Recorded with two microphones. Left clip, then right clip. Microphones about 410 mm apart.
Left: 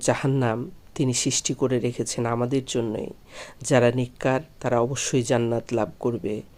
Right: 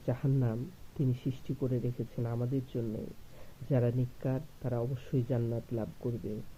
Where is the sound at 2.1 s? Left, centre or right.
Centre.